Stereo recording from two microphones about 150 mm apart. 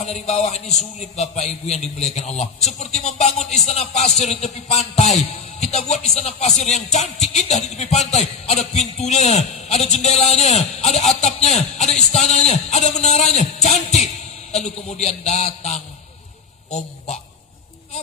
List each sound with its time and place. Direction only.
0.0 s a man's voice: 45° left (ahead or behind)